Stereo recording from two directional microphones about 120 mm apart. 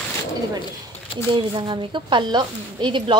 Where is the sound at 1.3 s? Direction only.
45° right (ahead or behind).